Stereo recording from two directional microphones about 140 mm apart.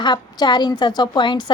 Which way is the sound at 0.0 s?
30° left (ahead or behind).